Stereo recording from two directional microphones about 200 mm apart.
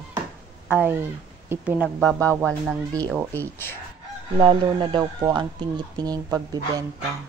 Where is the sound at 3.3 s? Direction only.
10° left (ahead or behind).